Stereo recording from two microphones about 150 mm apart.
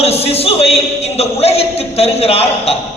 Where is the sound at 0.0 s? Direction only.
40° left (ahead or behind).